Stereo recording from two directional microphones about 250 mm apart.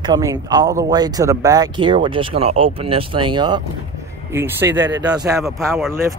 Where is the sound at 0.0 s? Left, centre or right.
Centre.